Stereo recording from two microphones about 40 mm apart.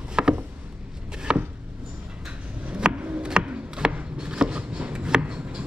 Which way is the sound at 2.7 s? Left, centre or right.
Right.